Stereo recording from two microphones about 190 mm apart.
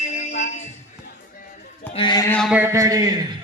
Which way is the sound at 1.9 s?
25° left (ahead or behind).